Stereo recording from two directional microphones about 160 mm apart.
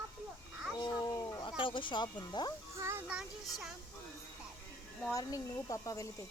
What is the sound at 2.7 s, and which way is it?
Speech, 15° right (ahead or behind).